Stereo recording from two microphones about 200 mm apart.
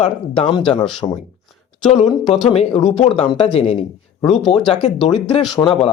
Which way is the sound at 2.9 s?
30° left (ahead or behind).